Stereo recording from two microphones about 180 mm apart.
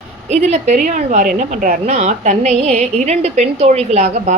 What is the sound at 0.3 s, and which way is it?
A woman's voice, 40° right (ahead or behind).